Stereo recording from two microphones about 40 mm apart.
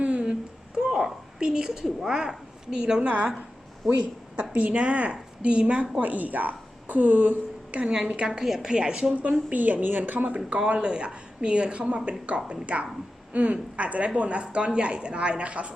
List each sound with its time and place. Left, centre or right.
0.2 s a sound: centre
1.4 s a woman's voice: right
3.1 s a woman's voice: right
6.0 s a woman's voice: right
7.9 s a woman's voice: right
8.3 s a woman's voice: centre
8.7 s a woman's voice: right
9.1 s a woman's voice: right
10.7 s a woman's voice: right